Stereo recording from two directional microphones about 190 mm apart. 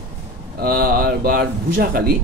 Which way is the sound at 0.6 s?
50° right (ahead or behind).